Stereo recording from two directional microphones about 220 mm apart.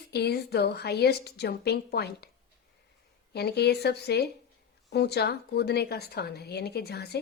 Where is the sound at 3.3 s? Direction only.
50° left (ahead or behind).